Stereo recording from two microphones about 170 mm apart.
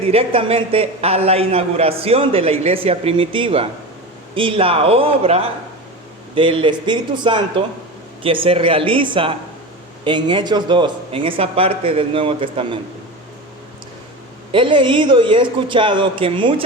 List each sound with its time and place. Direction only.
0.1 s a man's voice: 35° right (ahead or behind)
14.5 s a man's voice: 30° right (ahead or behind)